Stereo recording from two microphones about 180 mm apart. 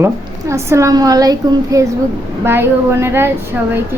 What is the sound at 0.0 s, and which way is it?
A woman's voice, 15° right (ahead or behind).